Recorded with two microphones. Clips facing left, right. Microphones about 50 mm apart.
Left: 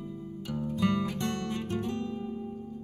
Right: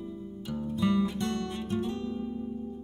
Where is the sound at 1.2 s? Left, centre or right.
Left.